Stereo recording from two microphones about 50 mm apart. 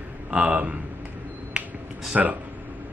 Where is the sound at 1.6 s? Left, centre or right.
Right.